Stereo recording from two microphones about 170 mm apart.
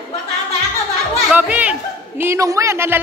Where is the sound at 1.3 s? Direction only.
5° right (ahead or behind).